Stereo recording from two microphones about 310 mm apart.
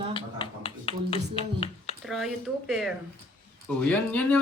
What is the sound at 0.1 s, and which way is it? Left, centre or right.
Finger snapping, centre.